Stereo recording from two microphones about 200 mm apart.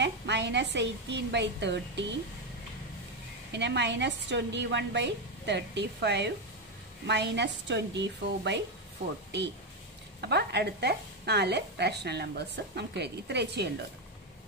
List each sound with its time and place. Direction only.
0.0 s a woman's voice: 60° right (ahead or behind)
3.5 s a woman's voice: 60° right (ahead or behind)
10.2 s a woman's voice: 55° right (ahead or behind)